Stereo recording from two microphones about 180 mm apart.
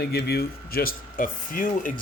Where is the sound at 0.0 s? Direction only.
60° left (ahead or behind).